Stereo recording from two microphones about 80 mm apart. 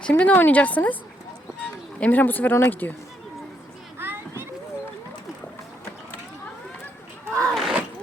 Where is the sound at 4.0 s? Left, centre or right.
Right.